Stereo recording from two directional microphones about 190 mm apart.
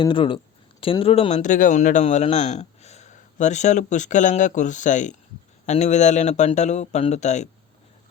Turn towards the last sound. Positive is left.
turn(degrees=40)  # may be behind; listen again after turning